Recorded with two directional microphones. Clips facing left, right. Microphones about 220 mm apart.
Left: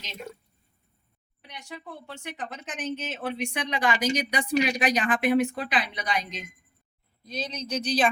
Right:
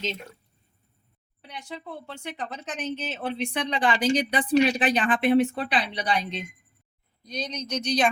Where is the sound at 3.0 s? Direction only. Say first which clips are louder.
Right 1 dB; 30° right (ahead or behind).